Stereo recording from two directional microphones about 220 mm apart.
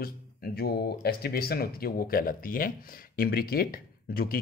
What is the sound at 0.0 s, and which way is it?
Speech, 45° left (ahead or behind).